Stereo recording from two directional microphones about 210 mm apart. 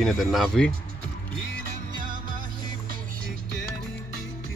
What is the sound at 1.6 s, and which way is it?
Music, 40° right (ahead or behind).